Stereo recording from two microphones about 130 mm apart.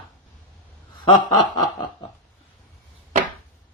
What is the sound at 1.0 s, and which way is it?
Speech, 35° left (ahead or behind).